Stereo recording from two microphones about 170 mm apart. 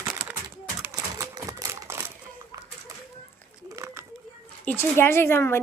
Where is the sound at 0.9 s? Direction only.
20° right (ahead or behind).